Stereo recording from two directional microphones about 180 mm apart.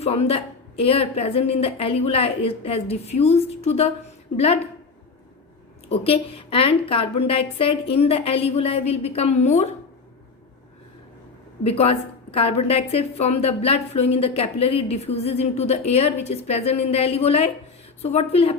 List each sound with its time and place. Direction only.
0.0 s a woman's voice: 35° left (ahead or behind)
5.9 s a woman's voice: 35° left (ahead or behind)
11.6 s a woman's voice: 35° left (ahead or behind)